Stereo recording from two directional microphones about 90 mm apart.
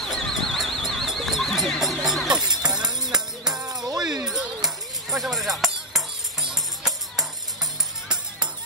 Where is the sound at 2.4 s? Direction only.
50° right (ahead or behind).